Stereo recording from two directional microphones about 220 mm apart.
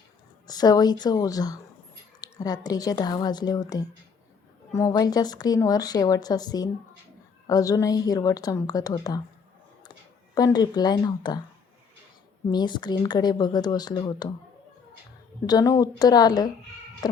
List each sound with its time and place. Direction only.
0.4 s a woman's voice: 15° left (ahead or behind)
10.3 s speech: 20° left (ahead or behind)
12.5 s speech: 20° left (ahead or behind)
15.4 s a woman's voice: 15° left (ahead or behind)